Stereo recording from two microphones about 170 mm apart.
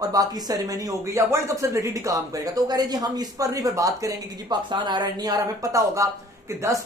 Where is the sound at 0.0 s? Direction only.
20° right (ahead or behind).